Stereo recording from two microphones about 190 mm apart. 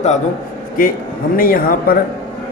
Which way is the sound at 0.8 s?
50° left (ahead or behind).